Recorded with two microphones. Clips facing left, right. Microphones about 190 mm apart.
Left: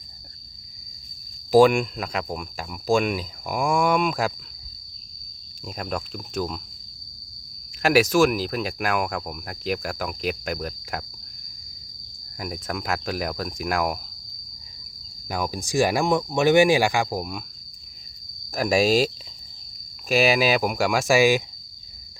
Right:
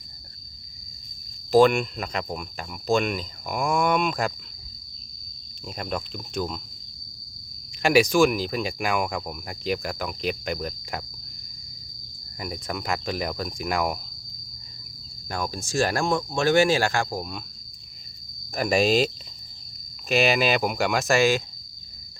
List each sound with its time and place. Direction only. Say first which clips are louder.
1.5 s speech: left 2 dB; 10° left (ahead or behind)
5.6 s speech: left 1 dB; centre (ahead or behind)
7.8 s speech: even; 5° left (ahead or behind)
12.4 s speech: left 1 dB; 5° left (ahead or behind)
15.3 s speech: left 3 dB; 10° left (ahead or behind)
18.5 s speech: left 1 dB; 5° left (ahead or behind)